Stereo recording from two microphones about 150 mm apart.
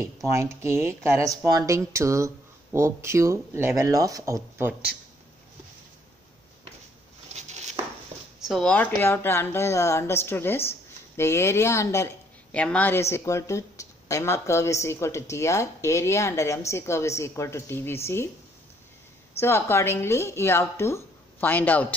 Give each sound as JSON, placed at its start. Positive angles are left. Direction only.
{"t": 0.0, "sound": "speech", "side_deg": -20}
{"t": 7.3, "sound": "a sound", "side_deg": -50}
{"t": 8.5, "sound": "speech", "side_deg": 5}
{"t": 12.5, "sound": "speech", "side_deg": 10}
{"t": 19.4, "sound": "speech", "side_deg": 15}